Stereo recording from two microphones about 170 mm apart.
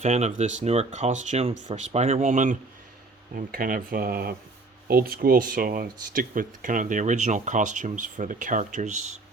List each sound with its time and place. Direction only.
0.0 s speech: 40° right (ahead or behind)
3.3 s speech: 55° right (ahead or behind)